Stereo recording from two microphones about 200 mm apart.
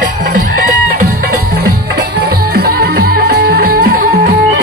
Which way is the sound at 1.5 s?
60° right (ahead or behind).